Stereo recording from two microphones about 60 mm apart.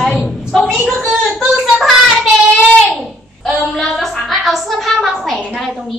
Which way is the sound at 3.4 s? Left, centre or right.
Centre.